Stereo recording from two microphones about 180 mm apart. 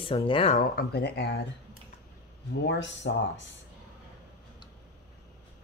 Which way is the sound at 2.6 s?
80° left.